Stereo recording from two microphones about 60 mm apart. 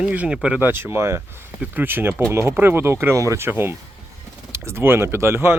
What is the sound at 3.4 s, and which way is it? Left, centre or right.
Speech, right.